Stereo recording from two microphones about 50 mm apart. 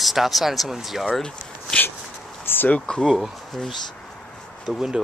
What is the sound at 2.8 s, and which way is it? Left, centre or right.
Speech, centre.